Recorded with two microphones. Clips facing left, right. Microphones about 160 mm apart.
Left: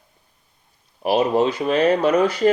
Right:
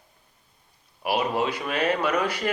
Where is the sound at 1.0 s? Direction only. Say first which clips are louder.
Left 7 dB; 30° left (ahead or behind).